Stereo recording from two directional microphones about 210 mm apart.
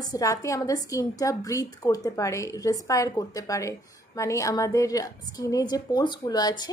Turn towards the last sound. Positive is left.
turn(degrees=20)  # may be behind; listen again after turning